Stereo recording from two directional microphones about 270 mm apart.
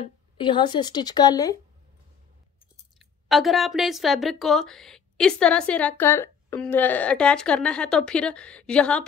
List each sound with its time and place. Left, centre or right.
0.0 s speech: centre
3.0 s speech: centre